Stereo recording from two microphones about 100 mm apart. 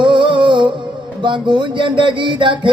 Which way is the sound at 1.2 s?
50° right (ahead or behind).